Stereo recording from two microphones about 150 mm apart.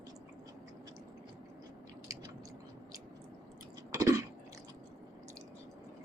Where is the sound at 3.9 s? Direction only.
25° right (ahead or behind).